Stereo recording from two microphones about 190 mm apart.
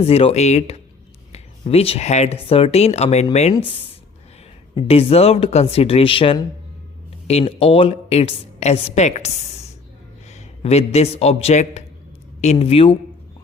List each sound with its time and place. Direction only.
0.0 s speech: 30° left (ahead or behind)
4.7 s a man's voice: 30° left (ahead or behind)